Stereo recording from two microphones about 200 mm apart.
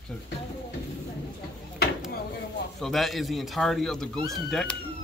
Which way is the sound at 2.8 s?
Centre (ahead or behind).